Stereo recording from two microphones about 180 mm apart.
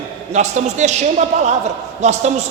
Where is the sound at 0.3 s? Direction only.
40° right (ahead or behind).